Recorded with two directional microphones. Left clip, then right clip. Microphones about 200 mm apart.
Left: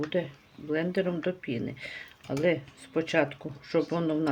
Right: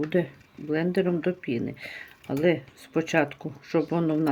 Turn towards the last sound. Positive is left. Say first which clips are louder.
# right 3 dB
turn(degrees=-20)  # may be behind; listen again after turning